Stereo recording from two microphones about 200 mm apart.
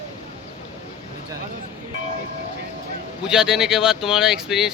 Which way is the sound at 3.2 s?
5° right (ahead or behind).